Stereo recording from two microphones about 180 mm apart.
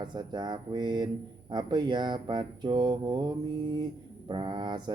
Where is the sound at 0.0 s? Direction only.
25° right (ahead or behind).